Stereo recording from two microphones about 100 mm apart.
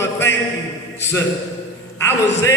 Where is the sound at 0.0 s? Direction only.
25° left (ahead or behind).